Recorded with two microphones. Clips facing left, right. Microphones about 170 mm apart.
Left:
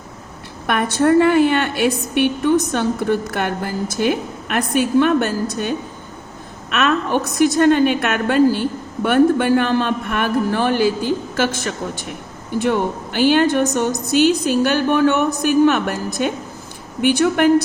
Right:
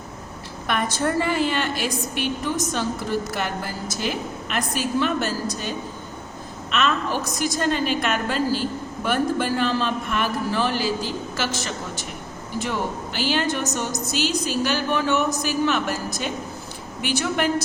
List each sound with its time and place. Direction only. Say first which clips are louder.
0.7 s a woman's voice: left 8 dB; 60° left (ahead or behind)